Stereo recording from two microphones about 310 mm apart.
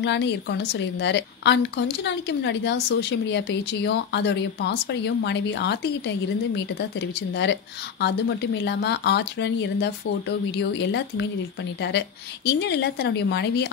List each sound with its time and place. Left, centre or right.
0.0 s a woman's voice: left
12.4 s a woman's voice: left